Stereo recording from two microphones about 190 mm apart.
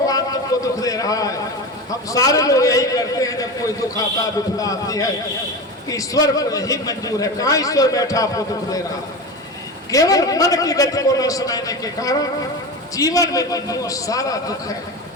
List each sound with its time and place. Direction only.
0.6 s a sound: 20° left (ahead or behind)
1.9 s a man's voice: 15° left (ahead or behind)
9.9 s a man's voice: 20° left (ahead or behind)